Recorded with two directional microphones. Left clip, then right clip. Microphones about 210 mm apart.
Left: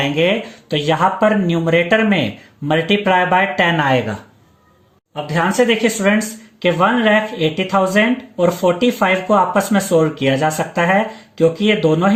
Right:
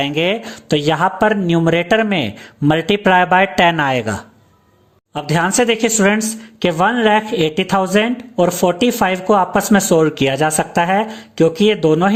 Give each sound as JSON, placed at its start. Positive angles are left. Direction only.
{"t": 0.0, "sound": "speech", "side_deg": -55}
{"t": 5.1, "sound": "speech", "side_deg": -55}